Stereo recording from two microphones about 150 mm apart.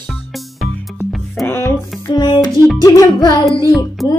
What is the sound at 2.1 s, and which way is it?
Music, 30° left (ahead or behind).